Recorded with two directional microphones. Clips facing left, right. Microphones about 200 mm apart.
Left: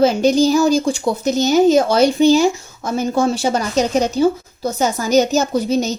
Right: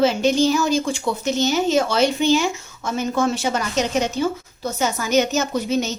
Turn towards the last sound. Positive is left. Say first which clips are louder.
# left 4 dB
turn(degrees=35)  # may be behind; listen again after turning